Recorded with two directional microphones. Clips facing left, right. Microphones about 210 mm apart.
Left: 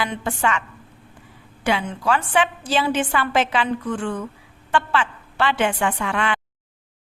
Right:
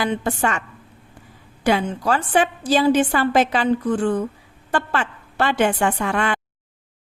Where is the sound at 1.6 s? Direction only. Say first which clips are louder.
Right 3 dB; 40° right (ahead or behind).